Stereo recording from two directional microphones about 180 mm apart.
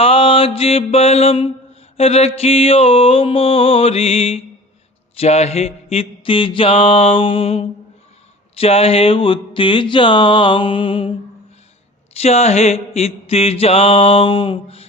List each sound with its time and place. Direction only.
0.0 s mantra: 30° left (ahead or behind)
8.5 s a sound: 35° left (ahead or behind)
12.2 s mantra: 35° left (ahead or behind)